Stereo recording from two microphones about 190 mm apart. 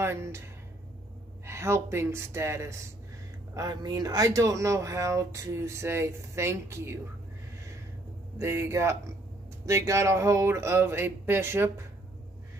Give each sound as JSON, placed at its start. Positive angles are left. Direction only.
{"t": 0.0, "sound": "speech", "side_deg": -15}
{"t": 1.4, "sound": "speech", "side_deg": -15}
{"t": 8.4, "sound": "speech", "side_deg": -15}